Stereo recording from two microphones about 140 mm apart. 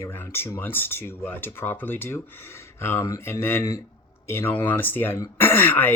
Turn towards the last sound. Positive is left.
turn(degrees=15)  # may be behind; listen again after turning